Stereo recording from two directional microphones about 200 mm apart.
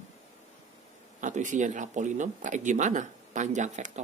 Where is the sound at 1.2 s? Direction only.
40° right (ahead or behind).